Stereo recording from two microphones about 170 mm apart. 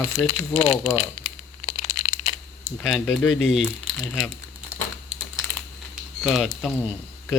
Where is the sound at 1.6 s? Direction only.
45° left (ahead or behind).